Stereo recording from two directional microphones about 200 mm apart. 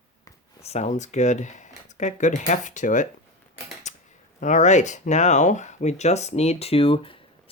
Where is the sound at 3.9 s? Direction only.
35° left (ahead or behind).